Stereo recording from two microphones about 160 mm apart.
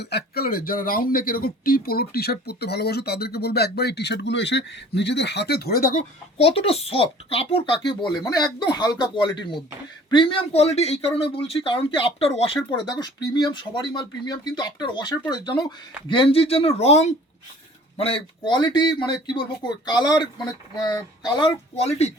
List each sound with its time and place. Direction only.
0.0 s speech: 80° left; by 6.1 s 60° left (ahead or behind)
6.4 s speech: 40° left (ahead or behind)
12.7 s speech: 25° left (ahead or behind)
21.8 s speech: 45° left (ahead or behind)